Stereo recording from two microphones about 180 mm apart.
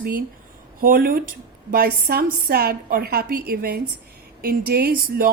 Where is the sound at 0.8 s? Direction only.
55° right (ahead or behind).